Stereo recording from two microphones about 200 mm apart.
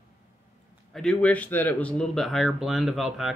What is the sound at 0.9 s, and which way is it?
Speech, 5° left (ahead or behind).